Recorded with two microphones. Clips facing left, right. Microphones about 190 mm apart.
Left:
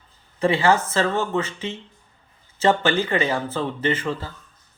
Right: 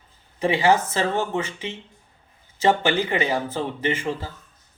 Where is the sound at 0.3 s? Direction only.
15° right (ahead or behind).